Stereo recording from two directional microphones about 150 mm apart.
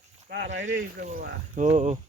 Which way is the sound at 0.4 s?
60° right (ahead or behind).